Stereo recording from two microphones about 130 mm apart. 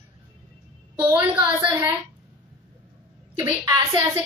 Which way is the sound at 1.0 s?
10° right (ahead or behind).